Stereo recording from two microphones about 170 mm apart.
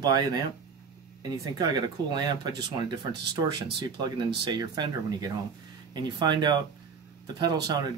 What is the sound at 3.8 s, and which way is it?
Speech, 25° right (ahead or behind).